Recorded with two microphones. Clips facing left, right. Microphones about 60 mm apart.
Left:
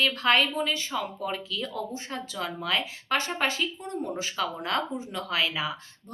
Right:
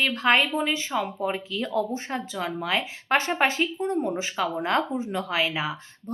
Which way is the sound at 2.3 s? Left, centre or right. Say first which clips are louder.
Right 1 dB; right.